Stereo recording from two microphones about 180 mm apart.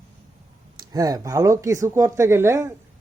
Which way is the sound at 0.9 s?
20° right (ahead or behind).